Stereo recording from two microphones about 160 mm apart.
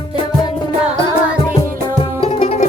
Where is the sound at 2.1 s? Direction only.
40° left (ahead or behind).